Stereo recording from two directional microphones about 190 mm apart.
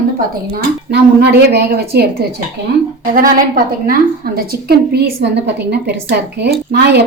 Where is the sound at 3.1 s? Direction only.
45° right (ahead or behind).